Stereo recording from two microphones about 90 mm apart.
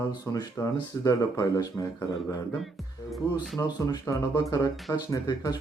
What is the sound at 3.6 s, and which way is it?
Speech, 45° left (ahead or behind).